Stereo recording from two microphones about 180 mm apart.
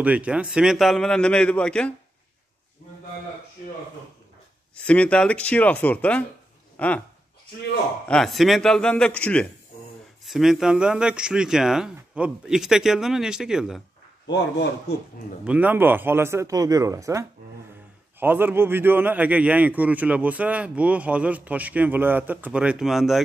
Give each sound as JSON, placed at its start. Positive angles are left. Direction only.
{"t": 0.0, "sound": "speech", "side_deg": -5}
{"t": 4.7, "sound": "speech", "side_deg": 5}
{"t": 8.1, "sound": "speech", "side_deg": 0}
{"t": 14.2, "sound": "a man's voice", "side_deg": 75}
{"t": 15.4, "sound": "a man's voice", "side_deg": -10}